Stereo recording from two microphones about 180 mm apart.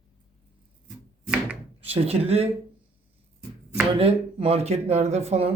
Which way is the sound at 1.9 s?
35° right (ahead or behind).